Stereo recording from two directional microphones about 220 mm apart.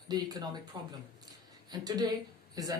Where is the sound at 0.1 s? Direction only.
20° right (ahead or behind).